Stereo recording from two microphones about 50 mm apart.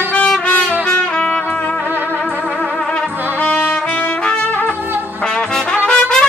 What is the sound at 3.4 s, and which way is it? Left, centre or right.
Trumpet, left.